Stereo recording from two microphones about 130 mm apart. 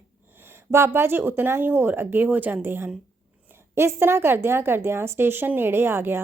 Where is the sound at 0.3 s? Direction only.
15° right (ahead or behind).